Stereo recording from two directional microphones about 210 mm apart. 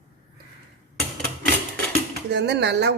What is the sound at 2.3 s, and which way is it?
Speech, 55° right (ahead or behind).